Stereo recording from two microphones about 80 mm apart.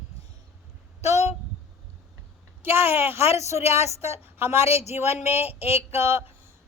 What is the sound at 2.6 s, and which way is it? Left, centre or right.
A woman's voice, right.